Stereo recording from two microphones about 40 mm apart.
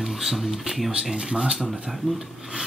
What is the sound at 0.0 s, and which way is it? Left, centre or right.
Speech, centre.